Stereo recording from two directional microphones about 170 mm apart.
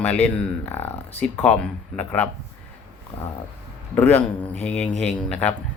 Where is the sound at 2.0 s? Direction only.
10° left (ahead or behind).